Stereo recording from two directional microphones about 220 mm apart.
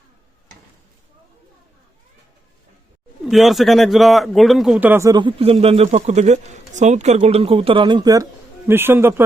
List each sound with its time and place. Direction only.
3.2 s speech: centre (ahead or behind)